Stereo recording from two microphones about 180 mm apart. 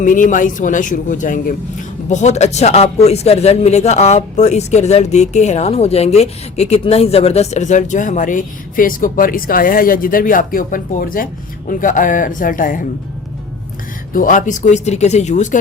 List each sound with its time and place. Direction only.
0.0 s speech: 45° left (ahead or behind)
14.1 s speech: 50° left (ahead or behind)